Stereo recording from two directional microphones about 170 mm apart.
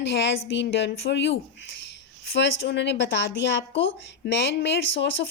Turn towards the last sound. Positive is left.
turn(degrees=90)